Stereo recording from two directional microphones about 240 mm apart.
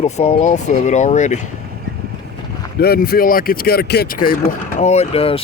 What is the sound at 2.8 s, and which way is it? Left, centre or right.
Speech, left.